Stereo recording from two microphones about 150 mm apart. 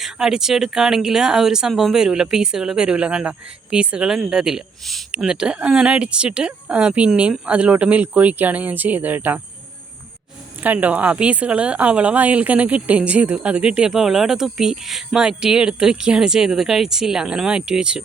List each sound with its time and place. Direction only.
0.0 s speech: 5° right (ahead or behind)
10.6 s speech: 10° right (ahead or behind)